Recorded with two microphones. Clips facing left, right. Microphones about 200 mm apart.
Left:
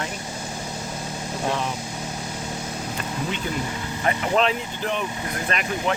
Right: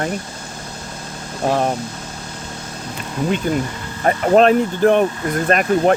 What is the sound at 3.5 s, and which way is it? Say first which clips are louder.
Speech: right 7 dB; 50° right (ahead or behind).